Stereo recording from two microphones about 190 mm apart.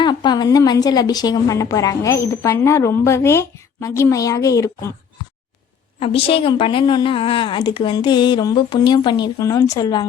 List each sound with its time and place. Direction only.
0.0 s a woman's voice: 25° left (ahead or behind)
6.0 s a woman's voice: 30° left (ahead or behind)